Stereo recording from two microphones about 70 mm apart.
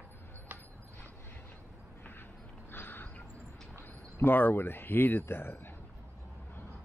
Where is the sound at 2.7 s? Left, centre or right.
Left.